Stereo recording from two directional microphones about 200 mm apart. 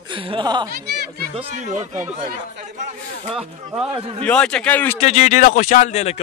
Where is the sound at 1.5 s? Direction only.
35° right (ahead or behind).